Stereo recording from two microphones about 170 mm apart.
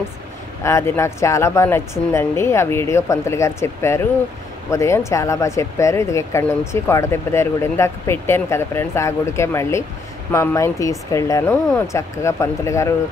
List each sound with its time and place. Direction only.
0.7 s speech: 15° left (ahead or behind)